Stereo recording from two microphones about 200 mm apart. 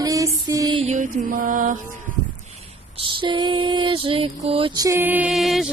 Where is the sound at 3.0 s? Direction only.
25° right (ahead or behind).